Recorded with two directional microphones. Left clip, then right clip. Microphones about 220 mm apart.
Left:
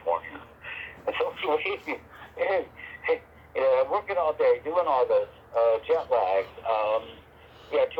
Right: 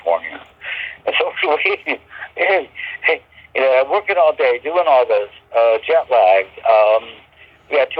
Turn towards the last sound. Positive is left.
turn(degrees=-25)  # may be behind; listen again after turning